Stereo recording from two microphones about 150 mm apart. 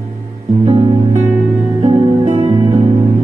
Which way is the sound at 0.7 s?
45° right (ahead or behind).